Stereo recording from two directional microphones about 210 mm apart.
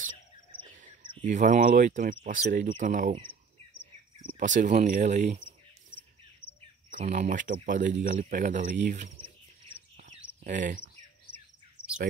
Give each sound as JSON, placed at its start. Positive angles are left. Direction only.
{"t": 0.6, "sound": "a sound", "side_deg": -35}
{"t": 1.2, "sound": "speech", "side_deg": -35}
{"t": 4.4, "sound": "speech", "side_deg": -35}
{"t": 6.9, "sound": "speech", "side_deg": -35}
{"t": 9.9, "sound": "bird", "side_deg": -35}